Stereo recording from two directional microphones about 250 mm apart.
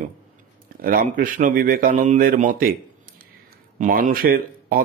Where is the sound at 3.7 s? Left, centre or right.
Right.